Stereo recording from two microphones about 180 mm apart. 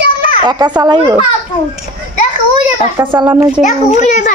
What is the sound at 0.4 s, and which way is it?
Speech, 25° right (ahead or behind).